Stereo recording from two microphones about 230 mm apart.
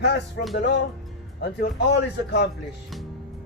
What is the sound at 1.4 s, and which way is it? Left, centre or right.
A man's voice, left.